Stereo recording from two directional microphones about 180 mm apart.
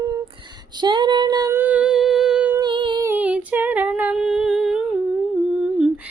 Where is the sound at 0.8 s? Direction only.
25° right (ahead or behind); by 2.5 s 5° right (ahead or behind).